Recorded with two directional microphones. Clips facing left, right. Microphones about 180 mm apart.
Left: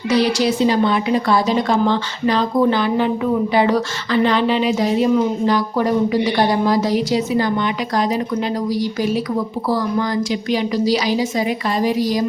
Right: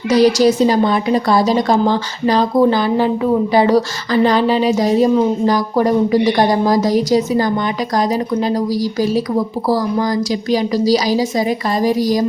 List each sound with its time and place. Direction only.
0.1 s a woman's voice: 40° right (ahead or behind)